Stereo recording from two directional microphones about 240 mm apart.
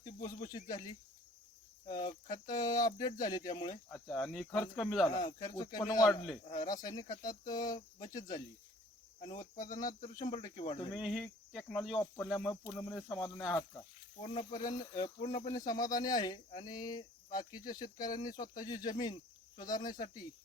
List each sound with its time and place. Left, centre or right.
0.3 s speech: centre
2.3 s speech: centre
3.8 s speech: centre
4.9 s speech: centre
6.1 s speech: centre
6.4 s speech: left
9.2 s speech: centre
10.2 s cricket: centre
10.9 s speech: centre
14.3 s cricket: left
14.6 s speech: centre